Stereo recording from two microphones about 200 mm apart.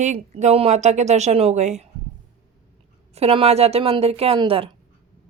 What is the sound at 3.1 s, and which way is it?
A woman's voice, 30° right (ahead or behind).